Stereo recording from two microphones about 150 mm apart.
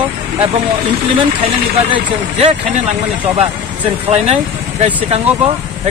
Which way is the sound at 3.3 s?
45° right (ahead or behind).